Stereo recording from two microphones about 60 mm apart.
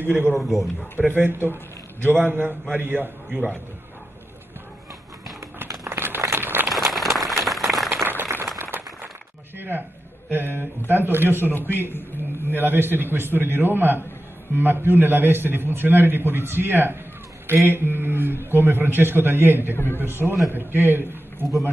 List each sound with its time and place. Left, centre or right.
0.0 s a man's voice: right
0.3 s speech: centre
1.5 s a man's voice: right
5.9 s crumpling: right
6.3 s a sound: right
6.7 s a sound: centre
7.9 s a sound: right
9.6 s a sound: right
10.3 s a man's voice: right
11.5 s a man's voice: left
12.4 s a man's voice: right
19.7 s a man's voice: left
20.2 s speech: centre
20.5 s a man's voice: right